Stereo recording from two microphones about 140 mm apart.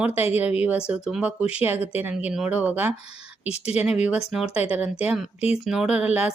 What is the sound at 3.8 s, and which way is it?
Speech, 10° right (ahead or behind).